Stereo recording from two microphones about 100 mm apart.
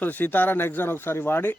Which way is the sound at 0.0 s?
20° left (ahead or behind).